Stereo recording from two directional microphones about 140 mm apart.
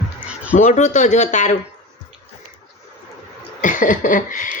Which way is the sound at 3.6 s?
70° left (ahead or behind).